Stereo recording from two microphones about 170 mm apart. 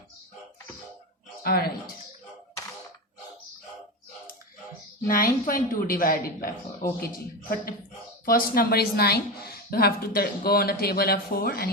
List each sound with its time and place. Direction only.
1.5 s a woman's voice: 60° left (ahead or behind)
5.0 s a woman's voice: 55° left (ahead or behind)